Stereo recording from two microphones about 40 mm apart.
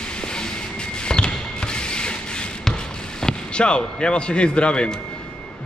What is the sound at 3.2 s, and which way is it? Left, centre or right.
A man's voice, left.